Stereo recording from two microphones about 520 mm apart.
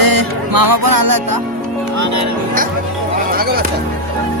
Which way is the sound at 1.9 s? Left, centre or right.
Right.